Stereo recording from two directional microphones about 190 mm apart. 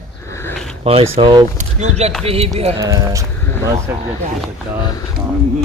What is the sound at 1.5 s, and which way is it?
A man's voice, 35° right (ahead or behind).